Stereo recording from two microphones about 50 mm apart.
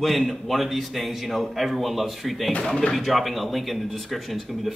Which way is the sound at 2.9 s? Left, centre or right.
Centre.